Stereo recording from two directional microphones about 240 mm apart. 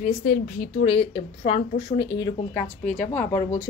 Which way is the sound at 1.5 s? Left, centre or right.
Left.